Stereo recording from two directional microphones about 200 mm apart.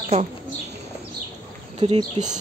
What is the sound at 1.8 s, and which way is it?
Speech, 30° right (ahead or behind).